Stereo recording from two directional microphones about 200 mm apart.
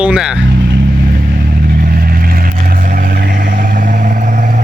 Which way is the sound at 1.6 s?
45° right (ahead or behind).